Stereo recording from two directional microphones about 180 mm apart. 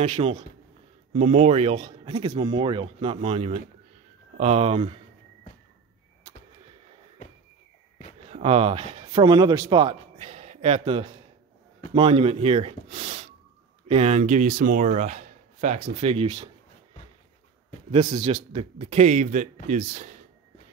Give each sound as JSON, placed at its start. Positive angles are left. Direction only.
{"t": 0.0, "sound": "speech", "side_deg": -35}
{"t": 8.3, "sound": "a man's voice", "side_deg": -35}
{"t": 17.9, "sound": "a man's voice", "side_deg": -30}